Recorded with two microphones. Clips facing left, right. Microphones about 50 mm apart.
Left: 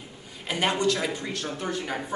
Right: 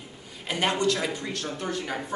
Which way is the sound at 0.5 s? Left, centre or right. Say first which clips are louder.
Even; centre.